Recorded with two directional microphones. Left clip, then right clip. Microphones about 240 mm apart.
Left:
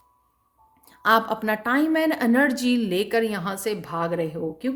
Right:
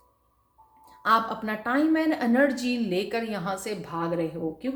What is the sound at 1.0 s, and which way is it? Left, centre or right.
A woman's voice, left.